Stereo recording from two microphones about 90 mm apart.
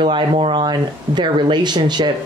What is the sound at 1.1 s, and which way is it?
Speech, 55° right (ahead or behind).